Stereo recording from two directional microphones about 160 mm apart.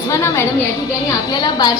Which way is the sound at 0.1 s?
15° left (ahead or behind).